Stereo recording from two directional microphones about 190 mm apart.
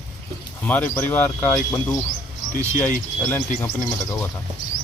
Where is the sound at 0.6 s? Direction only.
10° left (ahead or behind).